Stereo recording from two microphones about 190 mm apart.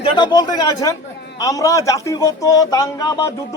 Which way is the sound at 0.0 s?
20° left (ahead or behind).